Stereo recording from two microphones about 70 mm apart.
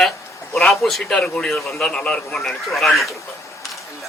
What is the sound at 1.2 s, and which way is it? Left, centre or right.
A man's voice, centre.